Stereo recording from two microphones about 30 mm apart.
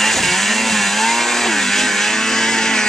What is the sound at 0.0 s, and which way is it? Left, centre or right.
Chainsaw, centre.